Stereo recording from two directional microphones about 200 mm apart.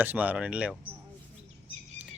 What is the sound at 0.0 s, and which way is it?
Speech, 10° right (ahead or behind).